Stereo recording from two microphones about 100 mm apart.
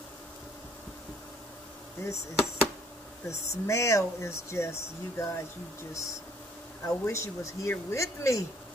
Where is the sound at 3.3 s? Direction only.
30° left (ahead or behind).